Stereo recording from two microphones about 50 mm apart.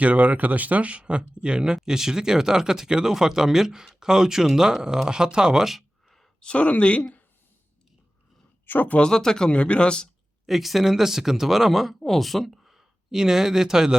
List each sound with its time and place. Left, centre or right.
0.0 s speech: right
5.6 s a sound: centre
6.4 s speech: left
8.6 s speech: left
9.0 s speech: centre
10.4 s speech: centre